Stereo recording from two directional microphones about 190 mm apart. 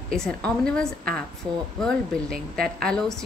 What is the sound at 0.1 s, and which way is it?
Speech, 5° left (ahead or behind).